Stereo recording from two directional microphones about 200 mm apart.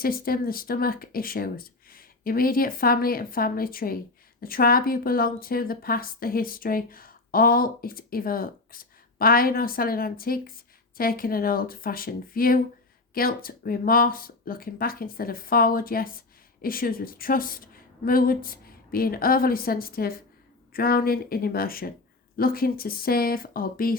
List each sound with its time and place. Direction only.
0.0 s speech: 45° left (ahead or behind)